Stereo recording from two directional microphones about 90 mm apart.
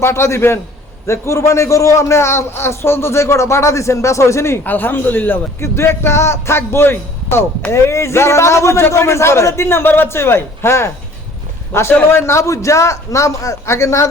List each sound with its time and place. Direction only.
0.0 s a man's voice: 30° left (ahead or behind)